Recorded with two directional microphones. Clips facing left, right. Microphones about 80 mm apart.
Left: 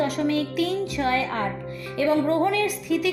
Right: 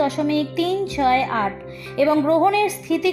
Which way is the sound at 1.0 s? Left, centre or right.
Right.